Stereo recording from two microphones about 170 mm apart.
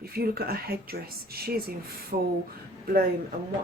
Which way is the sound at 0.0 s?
65° right (ahead or behind).